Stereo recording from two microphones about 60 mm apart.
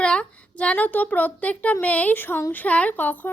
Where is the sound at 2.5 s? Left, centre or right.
Left.